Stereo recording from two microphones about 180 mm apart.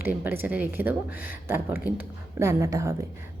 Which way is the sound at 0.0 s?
10° right (ahead or behind).